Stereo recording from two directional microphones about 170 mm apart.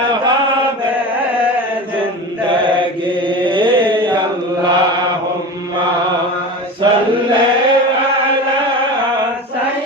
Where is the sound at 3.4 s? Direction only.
30° right (ahead or behind).